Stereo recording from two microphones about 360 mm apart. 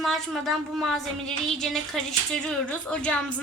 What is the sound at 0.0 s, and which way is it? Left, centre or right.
A woman's voice, centre.